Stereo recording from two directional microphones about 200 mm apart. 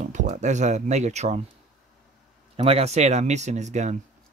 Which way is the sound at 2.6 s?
30° right (ahead or behind).